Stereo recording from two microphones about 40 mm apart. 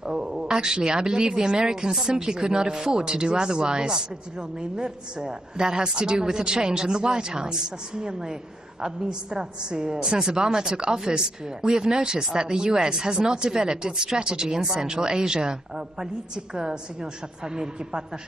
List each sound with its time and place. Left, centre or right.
0.0 s a woman's voice: centre
16.5 s speech: centre